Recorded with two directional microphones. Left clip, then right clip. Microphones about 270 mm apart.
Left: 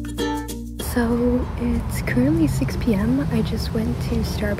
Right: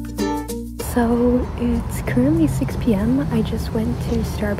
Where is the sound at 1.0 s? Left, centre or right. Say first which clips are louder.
Right 3 dB; centre.